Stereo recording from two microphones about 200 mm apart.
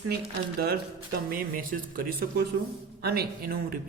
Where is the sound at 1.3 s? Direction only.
45° right (ahead or behind).